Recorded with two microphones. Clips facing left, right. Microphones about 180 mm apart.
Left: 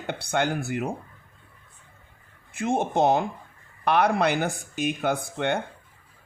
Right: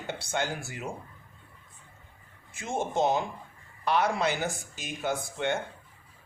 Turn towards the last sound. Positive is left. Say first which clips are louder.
# left 4 dB
turn(degrees=60)  # may be behind; listen again after turning